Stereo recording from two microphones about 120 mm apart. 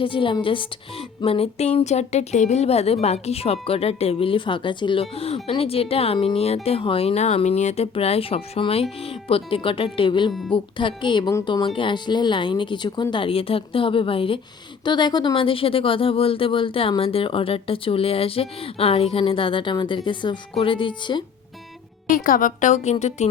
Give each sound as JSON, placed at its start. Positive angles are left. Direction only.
{"t": 0.0, "sound": "speech", "side_deg": 45}
{"t": 22.0, "sound": "a woman's voice", "side_deg": 90}